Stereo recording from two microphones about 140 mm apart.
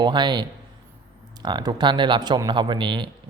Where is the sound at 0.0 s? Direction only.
30° right (ahead or behind).